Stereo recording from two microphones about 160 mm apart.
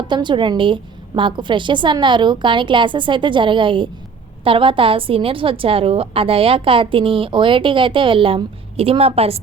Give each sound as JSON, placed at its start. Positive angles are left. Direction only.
{"t": 0.1, "sound": "a woman's voice", "side_deg": -30}